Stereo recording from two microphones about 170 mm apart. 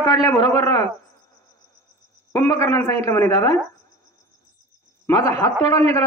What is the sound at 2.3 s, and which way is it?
Speech, 15° left (ahead or behind).